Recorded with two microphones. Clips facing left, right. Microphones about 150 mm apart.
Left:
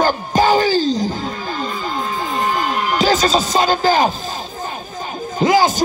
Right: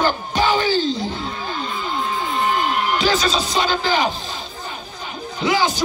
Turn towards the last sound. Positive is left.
turn(degrees=45)  # may be behind; listen again after turning